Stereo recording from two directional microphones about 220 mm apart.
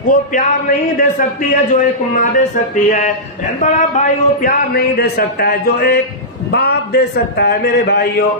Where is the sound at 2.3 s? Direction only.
35° left (ahead or behind).